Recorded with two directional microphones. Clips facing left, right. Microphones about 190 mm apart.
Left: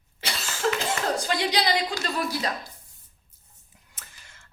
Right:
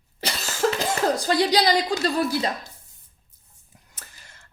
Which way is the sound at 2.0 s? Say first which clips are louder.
Right 5 dB; 35° right (ahead or behind).